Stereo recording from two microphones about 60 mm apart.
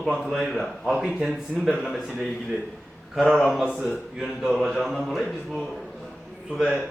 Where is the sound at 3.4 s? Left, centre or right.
Centre.